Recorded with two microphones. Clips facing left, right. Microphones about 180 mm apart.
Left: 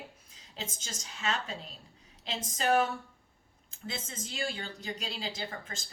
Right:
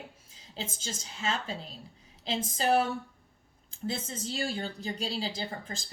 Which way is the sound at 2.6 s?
35° right (ahead or behind).